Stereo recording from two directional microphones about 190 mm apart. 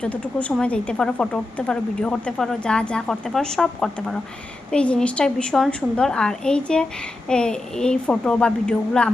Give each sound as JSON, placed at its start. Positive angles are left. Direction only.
{"t": 0.0, "sound": "a woman's voice", "side_deg": 5}